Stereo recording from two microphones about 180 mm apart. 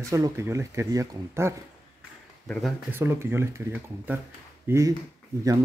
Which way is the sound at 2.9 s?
10° right (ahead or behind).